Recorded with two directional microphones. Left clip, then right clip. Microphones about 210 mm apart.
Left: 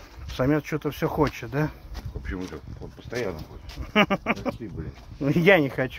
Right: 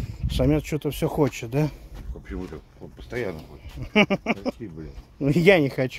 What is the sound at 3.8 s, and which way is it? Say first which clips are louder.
Speech: right 1 dB; 20° right (ahead or behind).